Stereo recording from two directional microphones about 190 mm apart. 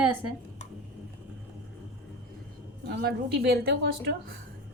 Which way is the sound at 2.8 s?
60° right (ahead or behind).